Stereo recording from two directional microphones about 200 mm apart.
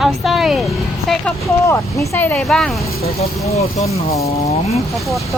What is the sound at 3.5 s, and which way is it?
Speech, 30° left (ahead or behind).